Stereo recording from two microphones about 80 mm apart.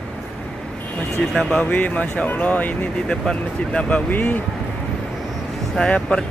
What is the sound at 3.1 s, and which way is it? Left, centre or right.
Speech, centre.